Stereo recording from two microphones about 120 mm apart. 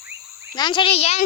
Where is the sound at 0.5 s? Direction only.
40° left (ahead or behind); by 1.2 s 60° left (ahead or behind).